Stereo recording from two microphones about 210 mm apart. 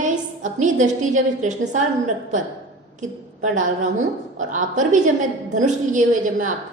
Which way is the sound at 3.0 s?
35° right (ahead or behind).